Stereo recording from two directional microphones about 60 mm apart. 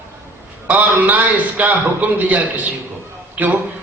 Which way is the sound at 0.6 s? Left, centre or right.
Right.